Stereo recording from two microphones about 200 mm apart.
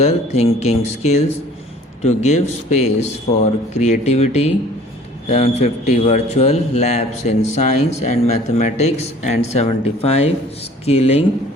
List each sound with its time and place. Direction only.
0.0 s a man's voice: 30° left (ahead or behind)